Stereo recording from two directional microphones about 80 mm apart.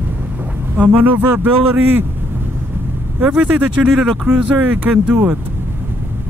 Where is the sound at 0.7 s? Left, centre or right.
Right.